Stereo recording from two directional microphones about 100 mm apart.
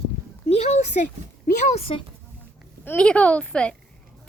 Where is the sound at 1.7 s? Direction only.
70° left (ahead or behind).